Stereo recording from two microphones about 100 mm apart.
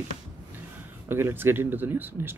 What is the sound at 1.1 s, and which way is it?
Speech, 20° right (ahead or behind).